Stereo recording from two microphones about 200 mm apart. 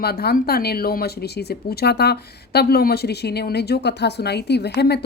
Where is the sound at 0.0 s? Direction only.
50° left (ahead or behind).